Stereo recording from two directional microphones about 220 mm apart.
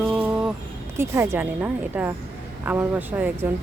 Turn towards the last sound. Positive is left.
turn(degrees=-10)  # may be behind; listen again after turning